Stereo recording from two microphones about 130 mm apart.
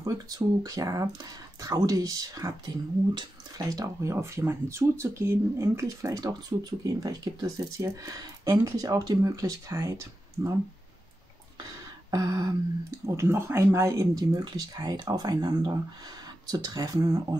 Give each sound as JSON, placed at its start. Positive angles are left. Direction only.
{"t": 0.0, "sound": "speech", "side_deg": -30}
{"t": 12.1, "sound": "speech", "side_deg": -30}